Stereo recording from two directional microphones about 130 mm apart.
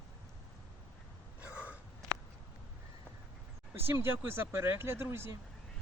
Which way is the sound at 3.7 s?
20° right (ahead or behind).